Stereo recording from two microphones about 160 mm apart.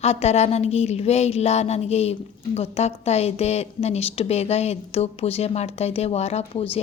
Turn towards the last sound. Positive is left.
turn(degrees=35)  # may be behind; listen again after turning